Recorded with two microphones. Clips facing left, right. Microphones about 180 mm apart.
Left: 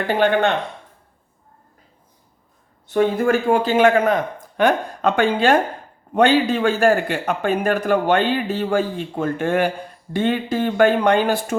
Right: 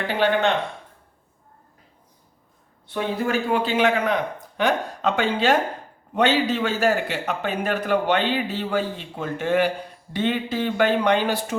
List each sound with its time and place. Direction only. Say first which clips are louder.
0.1 s a man's voice: left 3 dB; 50° left (ahead or behind)
2.8 s a man's voice: left 8 dB; 45° left (ahead or behind)